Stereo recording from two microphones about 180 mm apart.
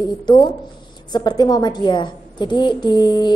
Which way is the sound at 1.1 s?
20° left (ahead or behind).